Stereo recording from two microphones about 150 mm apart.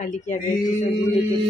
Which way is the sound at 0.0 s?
55° left (ahead or behind).